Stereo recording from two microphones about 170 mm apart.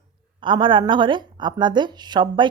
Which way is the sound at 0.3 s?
30° right (ahead or behind).